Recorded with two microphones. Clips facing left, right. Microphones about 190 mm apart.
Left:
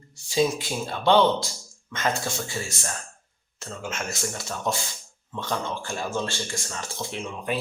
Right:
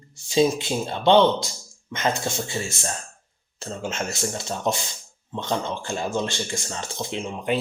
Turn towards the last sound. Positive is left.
turn(degrees=-25)  # may be behind; listen again after turning